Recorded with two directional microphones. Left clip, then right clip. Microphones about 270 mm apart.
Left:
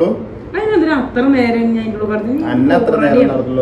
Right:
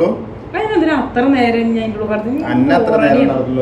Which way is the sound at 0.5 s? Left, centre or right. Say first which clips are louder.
Left 1 dB; centre.